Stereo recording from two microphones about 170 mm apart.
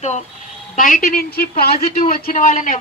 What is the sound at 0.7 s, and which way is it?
A man's voice, 50° left (ahead or behind).